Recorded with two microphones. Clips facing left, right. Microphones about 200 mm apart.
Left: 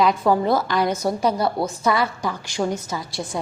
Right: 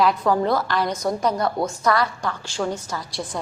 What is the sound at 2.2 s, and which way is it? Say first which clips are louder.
Speech: left 2 dB; 15° left (ahead or behind).